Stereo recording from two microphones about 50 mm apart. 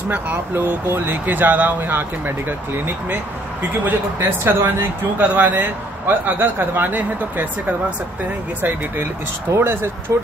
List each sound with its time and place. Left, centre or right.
0.1 s speech: right
3.8 s speech: right
4.6 s speech: right
5.2 s speech: right
5.5 s a man's voice: right
9.6 s a man's voice: right